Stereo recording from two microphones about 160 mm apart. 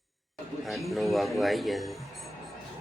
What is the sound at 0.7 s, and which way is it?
Music, centre (ahead or behind).